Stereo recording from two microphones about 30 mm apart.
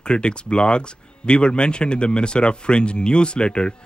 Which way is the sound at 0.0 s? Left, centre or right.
Left.